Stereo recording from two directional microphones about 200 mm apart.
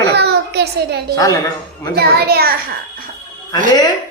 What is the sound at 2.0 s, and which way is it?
Child singing, 50° right (ahead or behind).